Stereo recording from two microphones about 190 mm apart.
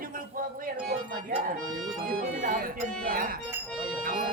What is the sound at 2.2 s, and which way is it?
Speech, 45° right (ahead or behind).